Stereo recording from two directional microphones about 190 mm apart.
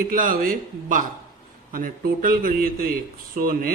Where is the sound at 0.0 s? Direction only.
45° right (ahead or behind).